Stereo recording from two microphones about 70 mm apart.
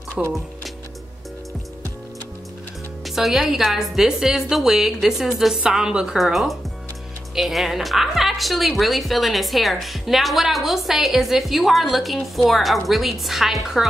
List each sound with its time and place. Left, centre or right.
0.2 s speech: centre
3.2 s speech: centre